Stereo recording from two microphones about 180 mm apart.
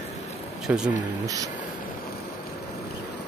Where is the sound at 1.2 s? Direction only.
20° right (ahead or behind).